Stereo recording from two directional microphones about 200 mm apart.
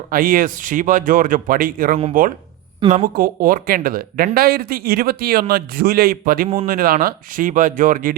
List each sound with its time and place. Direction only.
0.1 s a man's voice: 45° right (ahead or behind)
2.8 s a woman's voice: 25° right (ahead or behind)
3.2 s a man's voice: 45° right (ahead or behind)